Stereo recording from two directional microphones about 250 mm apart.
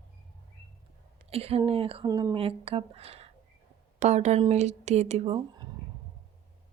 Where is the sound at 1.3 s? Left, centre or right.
Right.